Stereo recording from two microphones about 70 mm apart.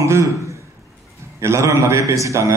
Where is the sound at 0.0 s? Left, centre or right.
Right.